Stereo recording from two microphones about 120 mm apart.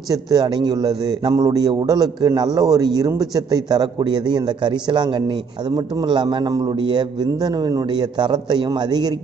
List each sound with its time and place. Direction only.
0.3 s a man's voice: 35° right (ahead or behind)